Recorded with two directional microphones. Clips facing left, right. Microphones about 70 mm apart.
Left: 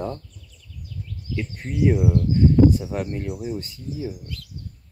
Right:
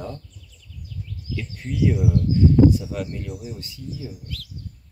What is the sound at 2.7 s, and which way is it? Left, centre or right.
Speech, left.